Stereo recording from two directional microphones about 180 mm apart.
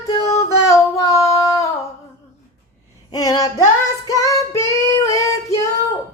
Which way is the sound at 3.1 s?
20° left (ahead or behind).